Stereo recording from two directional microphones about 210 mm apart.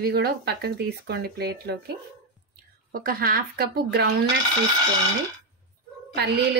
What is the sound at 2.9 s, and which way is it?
A woman's voice, 45° right (ahead or behind).